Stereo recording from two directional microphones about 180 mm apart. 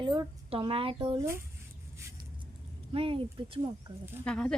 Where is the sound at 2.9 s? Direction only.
30° right (ahead or behind).